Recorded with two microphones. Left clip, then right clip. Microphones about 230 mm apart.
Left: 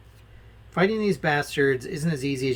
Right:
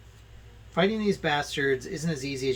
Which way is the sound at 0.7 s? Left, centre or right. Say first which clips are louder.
Left 2 dB; left.